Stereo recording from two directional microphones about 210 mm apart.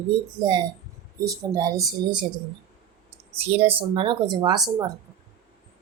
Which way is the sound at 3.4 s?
30° right (ahead or behind).